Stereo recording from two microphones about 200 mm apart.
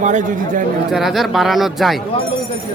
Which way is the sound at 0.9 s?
Centre (ahead or behind).